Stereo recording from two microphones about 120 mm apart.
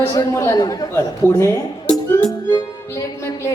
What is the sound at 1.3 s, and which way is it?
Speech, 20° left (ahead or behind).